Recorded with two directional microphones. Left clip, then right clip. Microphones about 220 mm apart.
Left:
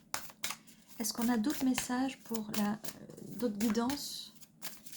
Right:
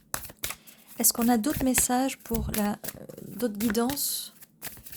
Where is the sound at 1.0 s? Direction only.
55° right (ahead or behind).